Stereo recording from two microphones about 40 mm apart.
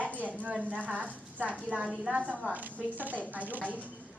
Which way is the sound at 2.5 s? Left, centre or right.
Right.